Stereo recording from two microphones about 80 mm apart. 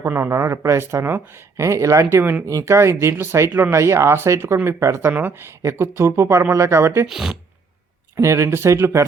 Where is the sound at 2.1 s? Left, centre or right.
Right.